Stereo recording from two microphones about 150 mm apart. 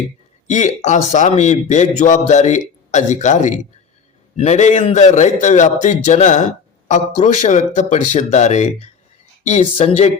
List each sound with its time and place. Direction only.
0.4 s a man's voice: 50° left (ahead or behind)